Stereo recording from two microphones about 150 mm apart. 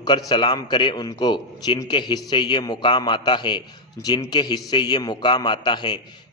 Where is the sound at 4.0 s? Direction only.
20° left (ahead or behind).